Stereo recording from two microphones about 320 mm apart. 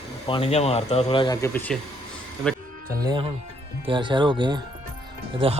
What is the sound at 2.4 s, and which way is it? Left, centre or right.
Music, centre.